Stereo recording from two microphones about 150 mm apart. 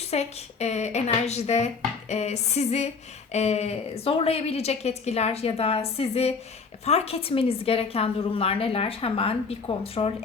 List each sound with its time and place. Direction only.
0.0 s a woman's voice: 45° left (ahead or behind)